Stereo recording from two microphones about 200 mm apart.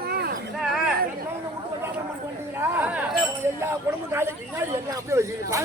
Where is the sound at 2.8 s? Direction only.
10° right (ahead or behind).